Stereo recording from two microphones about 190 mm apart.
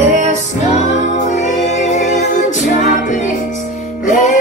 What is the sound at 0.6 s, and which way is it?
Music, 40° left (ahead or behind).